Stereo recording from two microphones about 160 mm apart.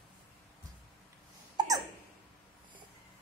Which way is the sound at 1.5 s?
25° right (ahead or behind).